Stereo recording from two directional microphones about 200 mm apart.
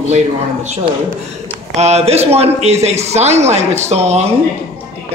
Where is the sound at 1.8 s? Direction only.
30° right (ahead or behind).